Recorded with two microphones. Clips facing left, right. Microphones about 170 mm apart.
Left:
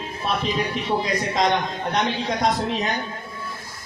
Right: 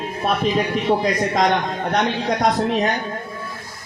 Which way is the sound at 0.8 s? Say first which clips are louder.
Right 5 dB; 50° right (ahead or behind).